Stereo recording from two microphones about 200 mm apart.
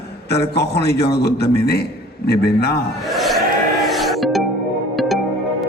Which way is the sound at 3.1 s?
Centre (ahead or behind).